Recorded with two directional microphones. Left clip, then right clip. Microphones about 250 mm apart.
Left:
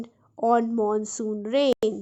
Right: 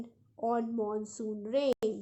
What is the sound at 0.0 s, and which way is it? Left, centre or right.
Speech, left.